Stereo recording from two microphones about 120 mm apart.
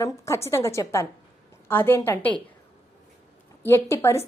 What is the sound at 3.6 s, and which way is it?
Speech, 20° left (ahead or behind).